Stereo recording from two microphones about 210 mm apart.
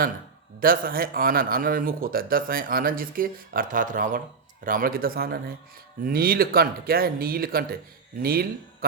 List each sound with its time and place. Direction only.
0.6 s speech: 45° right (ahead or behind)